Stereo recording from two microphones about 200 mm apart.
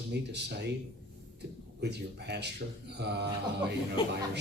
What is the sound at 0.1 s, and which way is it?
Speech, 60° right (ahead or behind).